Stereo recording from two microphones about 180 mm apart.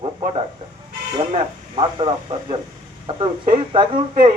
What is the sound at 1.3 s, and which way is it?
Speech, 30° right (ahead or behind).